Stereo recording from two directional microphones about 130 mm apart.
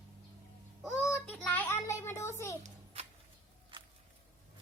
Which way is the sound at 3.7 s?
40° right (ahead or behind).